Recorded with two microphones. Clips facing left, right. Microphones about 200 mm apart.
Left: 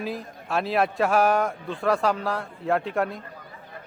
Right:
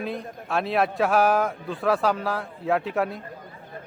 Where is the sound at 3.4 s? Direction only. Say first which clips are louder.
Right 2 dB; 45° right (ahead or behind).